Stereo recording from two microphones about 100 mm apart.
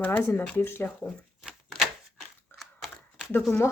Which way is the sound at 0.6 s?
25° left (ahead or behind).